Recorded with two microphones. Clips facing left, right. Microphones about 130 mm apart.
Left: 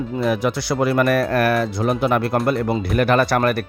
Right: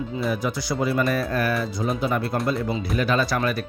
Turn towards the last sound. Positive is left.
turn(degrees=65)  # may be behind; listen again after turning